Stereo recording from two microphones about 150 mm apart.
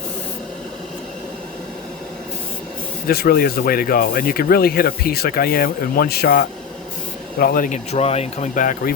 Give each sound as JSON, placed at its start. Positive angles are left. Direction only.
{"t": 3.1, "sound": "a man's voice", "side_deg": 90}
{"t": 7.9, "sound": "speech", "side_deg": 45}